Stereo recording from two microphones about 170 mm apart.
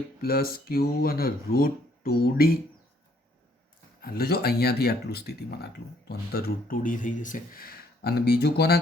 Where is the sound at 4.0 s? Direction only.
65° left (ahead or behind).